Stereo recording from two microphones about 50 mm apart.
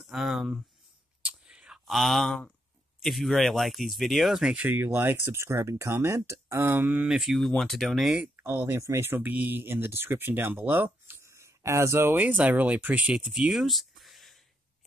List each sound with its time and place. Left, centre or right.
0.0 s speech: centre
1.2 s whispering: right
1.9 s speech: centre
4.6 s speech: right
5.0 s speech: right
6.6 s speech: right
7.0 s speech: centre
7.2 s speech: centre
8.7 s speech: right
9.2 s speech: right
11.1 s a sound: right
12.0 s speech: right
12.3 s speech: right
13.0 s speech: centre